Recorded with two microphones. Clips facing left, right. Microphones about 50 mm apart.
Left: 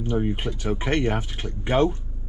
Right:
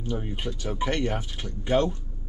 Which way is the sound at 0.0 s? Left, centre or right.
Left.